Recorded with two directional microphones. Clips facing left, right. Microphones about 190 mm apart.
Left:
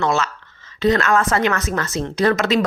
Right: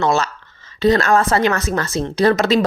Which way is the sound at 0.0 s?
35° right (ahead or behind).